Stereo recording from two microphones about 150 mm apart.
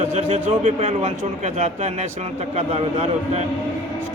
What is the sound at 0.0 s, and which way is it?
A man's voice, 50° right (ahead or behind).